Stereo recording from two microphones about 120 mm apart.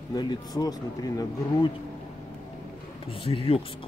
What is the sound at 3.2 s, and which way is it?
Speech, 50° left (ahead or behind).